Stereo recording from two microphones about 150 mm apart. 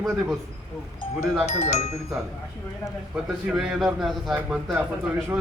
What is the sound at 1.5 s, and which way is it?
Speech, 45° left (ahead or behind).